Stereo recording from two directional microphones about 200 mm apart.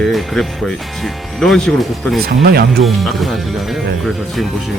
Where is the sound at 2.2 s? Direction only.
50° right (ahead or behind).